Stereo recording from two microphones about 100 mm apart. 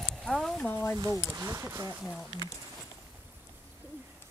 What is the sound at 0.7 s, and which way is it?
Speech, 20° left (ahead or behind).